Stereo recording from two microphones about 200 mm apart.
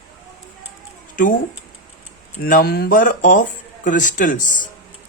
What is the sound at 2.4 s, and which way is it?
Speech, 45° left (ahead or behind).